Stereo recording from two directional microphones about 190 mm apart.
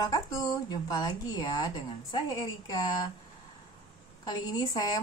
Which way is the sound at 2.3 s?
20° left (ahead or behind).